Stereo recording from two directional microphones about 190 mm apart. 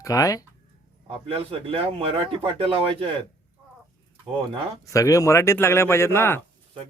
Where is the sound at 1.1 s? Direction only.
30° right (ahead or behind).